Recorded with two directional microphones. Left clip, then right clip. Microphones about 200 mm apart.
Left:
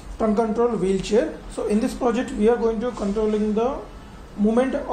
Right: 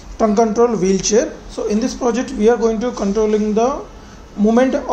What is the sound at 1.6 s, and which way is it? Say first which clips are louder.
Speech: right 4 dB; 5° right (ahead or behind).